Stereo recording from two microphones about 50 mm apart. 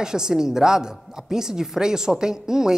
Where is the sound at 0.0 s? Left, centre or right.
Centre.